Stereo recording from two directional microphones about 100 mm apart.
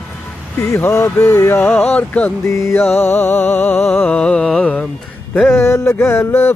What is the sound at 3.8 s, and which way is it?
Mantra, 10° left (ahead or behind).